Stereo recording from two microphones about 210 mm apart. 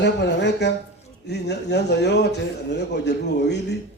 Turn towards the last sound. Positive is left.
turn(degrees=55)  # may be behind; listen again after turning